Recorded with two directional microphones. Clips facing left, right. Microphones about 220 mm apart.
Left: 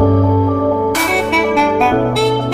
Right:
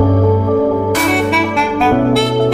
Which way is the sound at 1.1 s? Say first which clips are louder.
Left 1 dB; centre (ahead or behind).